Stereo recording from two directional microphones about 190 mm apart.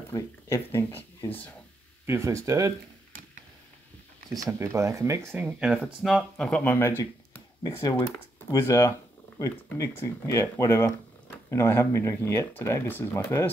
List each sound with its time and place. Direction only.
0.1 s speech: 15° left (ahead or behind)
2.0 s speech: 15° right (ahead or behind)
4.3 s speech: 15° right (ahead or behind); by 6.9 s 10° left (ahead or behind)
7.0 s a sound: 15° left (ahead or behind)
8.5 s speech: 15° left (ahead or behind)